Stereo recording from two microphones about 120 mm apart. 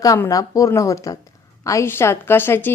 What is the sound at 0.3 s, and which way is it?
A woman's voice, 30° left (ahead or behind).